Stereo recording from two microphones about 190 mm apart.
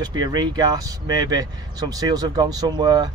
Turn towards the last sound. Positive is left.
turn(degrees=-20)  # may be behind; listen again after turning